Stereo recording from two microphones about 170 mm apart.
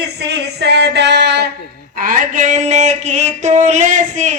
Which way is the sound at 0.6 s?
85° right.